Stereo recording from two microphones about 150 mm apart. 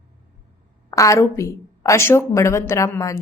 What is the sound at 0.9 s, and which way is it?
A woman's voice, 20° left (ahead or behind).